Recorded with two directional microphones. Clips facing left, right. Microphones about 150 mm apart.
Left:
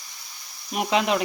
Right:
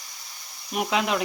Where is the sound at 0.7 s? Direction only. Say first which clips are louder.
Left 2 dB; centre (ahead or behind).